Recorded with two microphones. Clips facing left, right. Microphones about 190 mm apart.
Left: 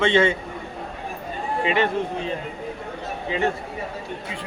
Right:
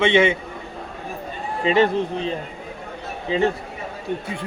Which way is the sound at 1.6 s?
35° right (ahead or behind).